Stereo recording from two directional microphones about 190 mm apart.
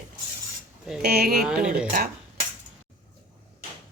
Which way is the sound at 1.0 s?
55° right (ahead or behind).